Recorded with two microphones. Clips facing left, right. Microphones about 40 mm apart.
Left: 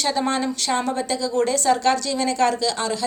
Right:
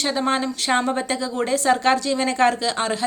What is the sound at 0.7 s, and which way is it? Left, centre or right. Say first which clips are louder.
Speech: right 3 dB; right.